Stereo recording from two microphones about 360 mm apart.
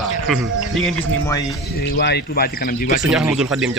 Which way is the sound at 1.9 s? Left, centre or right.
Left.